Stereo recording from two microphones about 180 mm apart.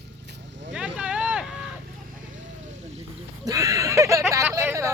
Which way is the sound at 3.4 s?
20° right (ahead or behind).